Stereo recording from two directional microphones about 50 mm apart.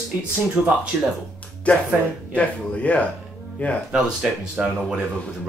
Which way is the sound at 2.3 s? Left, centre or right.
Left.